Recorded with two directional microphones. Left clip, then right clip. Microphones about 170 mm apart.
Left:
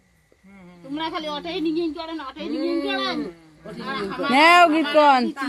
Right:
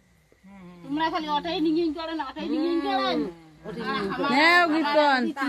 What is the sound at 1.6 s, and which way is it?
Speech, 15° left (ahead or behind).